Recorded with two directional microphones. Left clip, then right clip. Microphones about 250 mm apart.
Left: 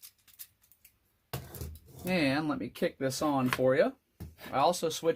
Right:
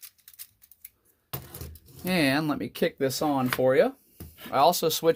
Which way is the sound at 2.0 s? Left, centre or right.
Right.